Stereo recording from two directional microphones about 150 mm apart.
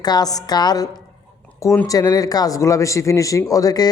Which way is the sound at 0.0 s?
25° left (ahead or behind).